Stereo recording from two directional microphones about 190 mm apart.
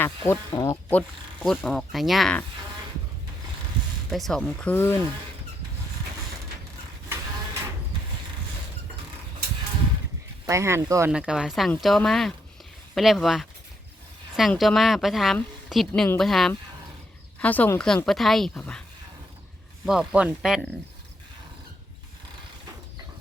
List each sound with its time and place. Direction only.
0.3 s a woman's voice: 15° left (ahead or behind); by 2.4 s centre (ahead or behind)
4.1 s a woman's voice: centre (ahead or behind)
10.4 s speech: 15° right (ahead or behind)
11.1 s a woman's voice: 5° right (ahead or behind)
19.8 s a woman's voice: 5° right (ahead or behind)